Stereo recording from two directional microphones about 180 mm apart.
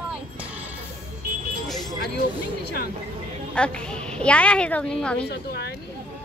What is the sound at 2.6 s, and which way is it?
Speech, 60° left (ahead or behind).